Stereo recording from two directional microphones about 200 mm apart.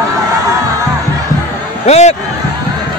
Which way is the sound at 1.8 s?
35° left (ahead or behind).